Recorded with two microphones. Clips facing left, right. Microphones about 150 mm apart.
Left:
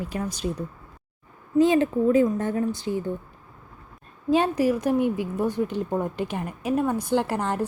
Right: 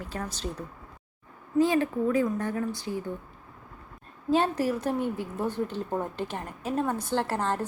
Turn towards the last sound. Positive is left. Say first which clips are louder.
# left 4 dB
turn(degrees=15)  # may be behind; listen again after turning